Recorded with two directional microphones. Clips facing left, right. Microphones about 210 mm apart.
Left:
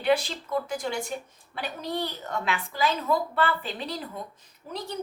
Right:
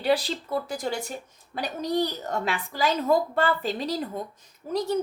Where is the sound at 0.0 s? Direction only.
35° right (ahead or behind).